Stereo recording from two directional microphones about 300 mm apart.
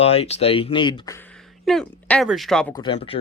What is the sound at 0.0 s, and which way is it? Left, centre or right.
Speech, centre.